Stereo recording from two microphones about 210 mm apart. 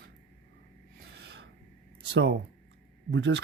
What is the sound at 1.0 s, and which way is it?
Gasp, 50° right (ahead or behind).